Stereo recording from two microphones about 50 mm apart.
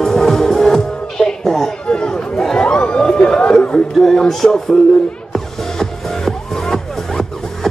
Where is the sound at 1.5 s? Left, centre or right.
Centre.